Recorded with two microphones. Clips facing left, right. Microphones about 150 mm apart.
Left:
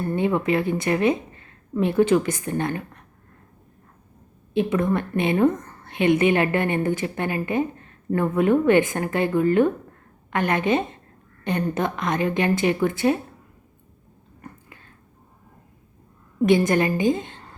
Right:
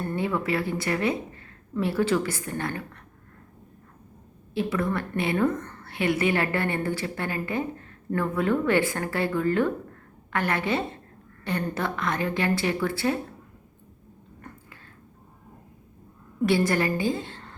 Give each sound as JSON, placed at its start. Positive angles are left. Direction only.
{"t": 0.2, "sound": "speech", "side_deg": 20}
{"t": 4.5, "sound": "a woman's voice", "side_deg": 20}
{"t": 16.4, "sound": "a woman's voice", "side_deg": 20}